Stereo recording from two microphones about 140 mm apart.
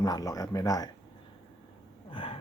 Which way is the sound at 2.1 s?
40° left (ahead or behind).